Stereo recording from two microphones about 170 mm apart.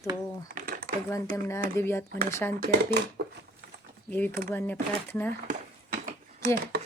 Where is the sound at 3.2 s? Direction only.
75° right (ahead or behind).